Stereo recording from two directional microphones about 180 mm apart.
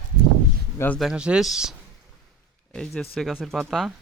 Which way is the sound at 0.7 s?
10° left (ahead or behind).